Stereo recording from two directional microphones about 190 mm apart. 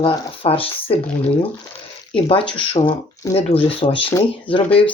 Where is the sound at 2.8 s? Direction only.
30° left (ahead or behind).